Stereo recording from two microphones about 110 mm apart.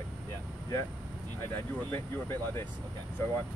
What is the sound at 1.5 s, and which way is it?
Speech, 20° left (ahead or behind).